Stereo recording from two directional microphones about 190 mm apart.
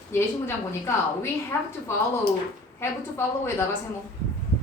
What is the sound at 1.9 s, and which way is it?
A woman's voice, 10° left (ahead or behind).